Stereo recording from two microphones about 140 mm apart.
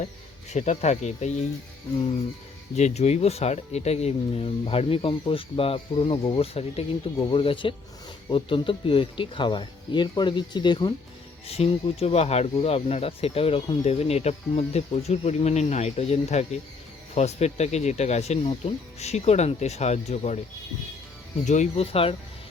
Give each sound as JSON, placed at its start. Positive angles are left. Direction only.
{"t": 0.5, "sound": "speech", "side_deg": 55}
{"t": 2.7, "sound": "speech", "side_deg": 50}
{"t": 11.4, "sound": "speech", "side_deg": 45}
{"t": 21.4, "sound": "speech", "side_deg": 60}